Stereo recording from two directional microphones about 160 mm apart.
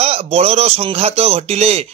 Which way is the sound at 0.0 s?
40° right (ahead or behind).